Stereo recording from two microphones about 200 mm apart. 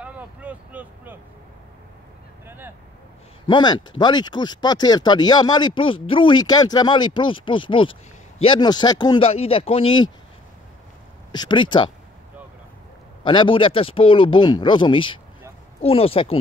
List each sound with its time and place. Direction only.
0.0 s vehicle: 5° right (ahead or behind)
2.4 s speech: 10° right (ahead or behind)
3.4 s speech: 20° left (ahead or behind)
11.3 s speech: 25° left (ahead or behind)
13.2 s speech: 25° left (ahead or behind)